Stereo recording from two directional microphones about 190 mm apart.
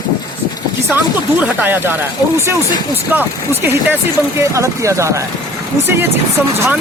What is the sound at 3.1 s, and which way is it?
Speech, 10° right (ahead or behind).